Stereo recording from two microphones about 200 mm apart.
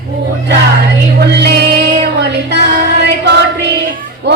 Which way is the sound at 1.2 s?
55° right (ahead or behind).